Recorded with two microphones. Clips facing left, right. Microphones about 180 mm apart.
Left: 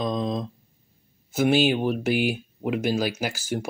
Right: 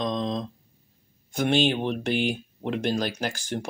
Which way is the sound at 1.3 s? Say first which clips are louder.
Left 3 dB; 5° left (ahead or behind).